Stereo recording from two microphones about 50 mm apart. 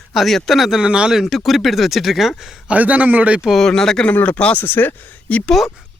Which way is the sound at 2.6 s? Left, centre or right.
Right.